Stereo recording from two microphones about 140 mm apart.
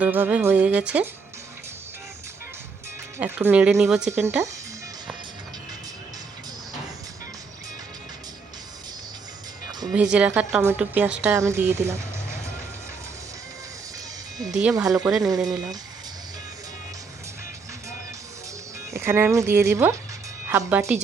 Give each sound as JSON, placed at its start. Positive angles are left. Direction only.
{"t": 0.0, "sound": "a woman's voice", "side_deg": -10}
{"t": 3.2, "sound": "a woman's voice", "side_deg": -15}
{"t": 9.9, "sound": "a woman's voice", "side_deg": -10}
{"t": 14.5, "sound": "speech", "side_deg": -5}
{"t": 18.9, "sound": "a woman's voice", "side_deg": -20}